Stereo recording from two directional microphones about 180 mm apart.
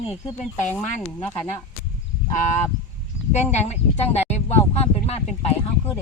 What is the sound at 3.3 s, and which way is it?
Speech, 40° left (ahead or behind).